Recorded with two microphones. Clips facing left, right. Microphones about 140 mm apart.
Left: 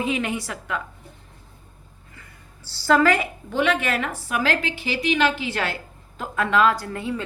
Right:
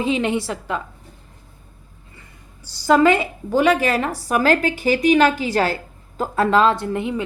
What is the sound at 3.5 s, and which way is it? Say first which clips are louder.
A woman's voice: right 6 dB; 40° right (ahead or behind).